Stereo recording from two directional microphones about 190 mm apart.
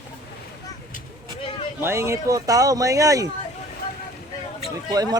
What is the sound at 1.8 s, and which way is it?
Speech, 15° right (ahead or behind).